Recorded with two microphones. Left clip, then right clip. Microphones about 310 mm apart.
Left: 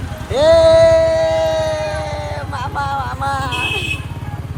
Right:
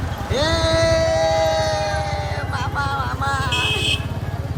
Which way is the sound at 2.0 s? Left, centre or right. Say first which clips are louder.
Left 1 dB; centre.